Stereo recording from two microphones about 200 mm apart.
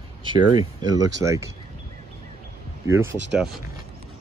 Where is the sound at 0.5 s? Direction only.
20° right (ahead or behind).